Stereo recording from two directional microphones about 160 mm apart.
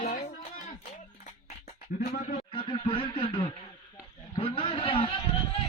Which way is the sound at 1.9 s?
50° left (ahead or behind).